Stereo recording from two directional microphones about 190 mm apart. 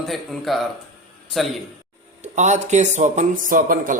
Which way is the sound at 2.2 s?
40° right (ahead or behind).